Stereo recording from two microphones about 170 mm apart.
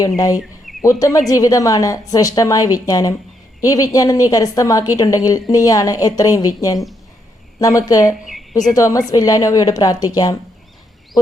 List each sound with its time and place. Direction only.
0.9 s a woman's voice: 20° left (ahead or behind)
8.1 s a woman's voice: centre (ahead or behind)
8.7 s a woman's voice: 20° left (ahead or behind)